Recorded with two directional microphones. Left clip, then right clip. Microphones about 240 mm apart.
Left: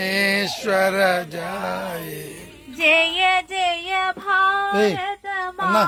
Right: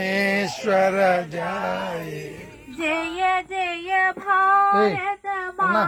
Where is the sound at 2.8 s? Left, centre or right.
Left.